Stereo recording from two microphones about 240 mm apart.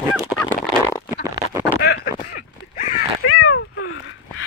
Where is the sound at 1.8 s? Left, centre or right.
Left.